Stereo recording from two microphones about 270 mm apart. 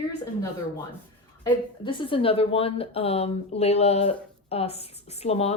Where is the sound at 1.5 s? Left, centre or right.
Centre.